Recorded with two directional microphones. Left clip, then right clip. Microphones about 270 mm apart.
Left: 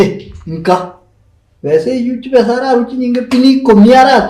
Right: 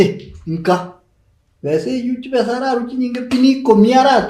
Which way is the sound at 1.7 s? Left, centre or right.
Right.